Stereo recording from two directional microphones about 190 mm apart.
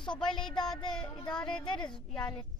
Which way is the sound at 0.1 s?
5° left (ahead or behind).